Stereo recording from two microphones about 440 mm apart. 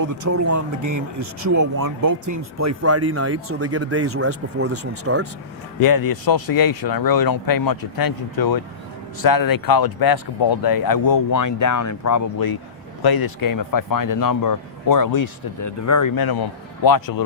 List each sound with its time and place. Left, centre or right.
0.0 s speech: right
5.8 s a man's voice: left